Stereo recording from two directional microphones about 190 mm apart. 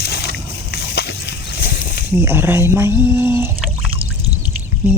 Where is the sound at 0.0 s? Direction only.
60° left (ahead or behind).